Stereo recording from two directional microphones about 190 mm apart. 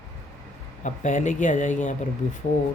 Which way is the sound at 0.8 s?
40° left (ahead or behind).